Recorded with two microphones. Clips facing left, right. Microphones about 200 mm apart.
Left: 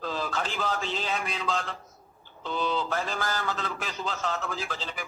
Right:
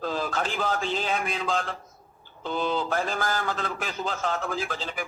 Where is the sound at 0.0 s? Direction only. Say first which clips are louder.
Right 3 dB; 50° right (ahead or behind).